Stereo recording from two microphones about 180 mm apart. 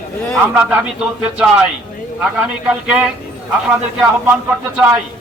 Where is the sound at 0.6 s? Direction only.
5° right (ahead or behind).